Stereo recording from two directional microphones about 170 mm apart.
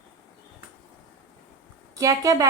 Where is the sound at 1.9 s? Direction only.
20° right (ahead or behind).